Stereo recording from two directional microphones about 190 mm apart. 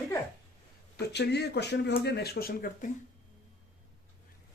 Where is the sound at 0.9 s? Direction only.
60° left (ahead or behind).